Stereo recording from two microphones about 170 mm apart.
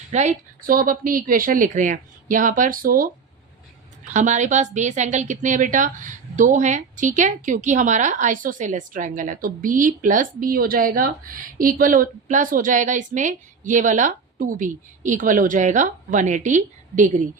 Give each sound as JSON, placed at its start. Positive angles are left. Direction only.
{"t": 0.1, "sound": "a woman's voice", "side_deg": -45}
{"t": 4.0, "sound": "a woman's voice", "side_deg": -45}